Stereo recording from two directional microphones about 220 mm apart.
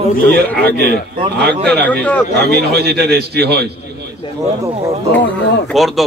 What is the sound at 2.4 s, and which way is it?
A man's voice, 45° right (ahead or behind).